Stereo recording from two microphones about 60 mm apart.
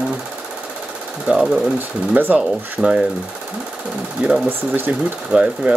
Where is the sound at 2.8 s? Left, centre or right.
Centre.